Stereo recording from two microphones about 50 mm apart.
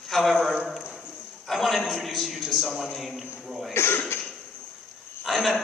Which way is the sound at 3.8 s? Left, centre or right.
Left.